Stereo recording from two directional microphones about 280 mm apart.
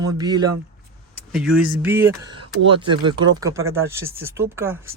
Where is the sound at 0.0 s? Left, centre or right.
Centre.